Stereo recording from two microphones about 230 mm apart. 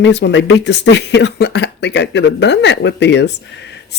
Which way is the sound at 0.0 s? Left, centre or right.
Left.